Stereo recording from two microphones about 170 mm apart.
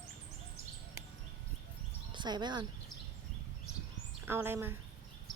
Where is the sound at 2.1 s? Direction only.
25° right (ahead or behind).